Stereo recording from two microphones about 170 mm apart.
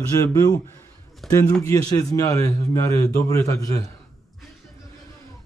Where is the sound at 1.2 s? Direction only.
Centre (ahead or behind).